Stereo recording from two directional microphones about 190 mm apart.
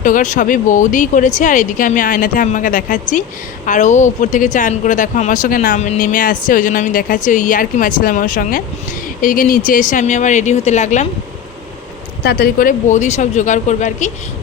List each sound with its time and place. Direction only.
0.0 s a woman's voice: 40° left (ahead or behind)
12.2 s speech: 55° left (ahead or behind); by 14.1 s 40° left (ahead or behind)